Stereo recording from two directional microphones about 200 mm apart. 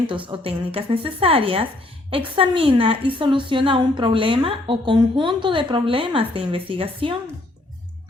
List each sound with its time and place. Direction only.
0.3 s a woman's voice: 25° right (ahead or behind)